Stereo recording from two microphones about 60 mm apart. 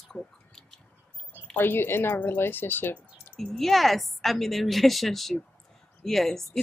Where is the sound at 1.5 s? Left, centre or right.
Left.